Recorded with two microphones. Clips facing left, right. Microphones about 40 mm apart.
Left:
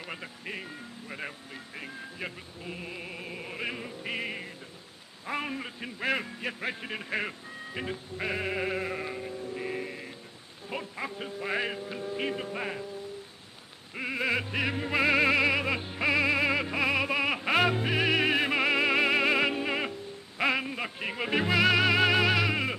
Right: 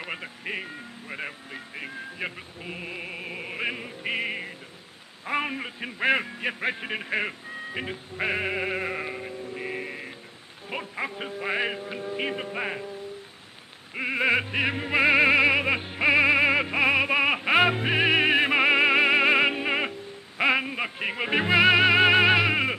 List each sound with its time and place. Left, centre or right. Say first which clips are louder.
0.0 s a sound: right 5 dB; right
5.2 s a man's voice: right 5 dB; right
13.9 s opera: right 6 dB; right